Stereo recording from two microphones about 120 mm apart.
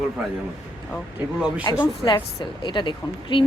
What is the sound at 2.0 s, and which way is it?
A woman's voice, 40° left (ahead or behind).